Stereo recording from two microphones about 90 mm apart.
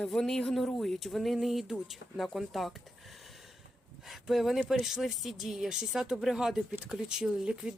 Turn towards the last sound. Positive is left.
turn(degrees=-10)  # may be behind; listen again after turning